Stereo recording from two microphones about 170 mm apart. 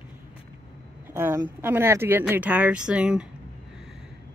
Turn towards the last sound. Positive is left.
turn(degrees=-5)  # may be behind; listen again after turning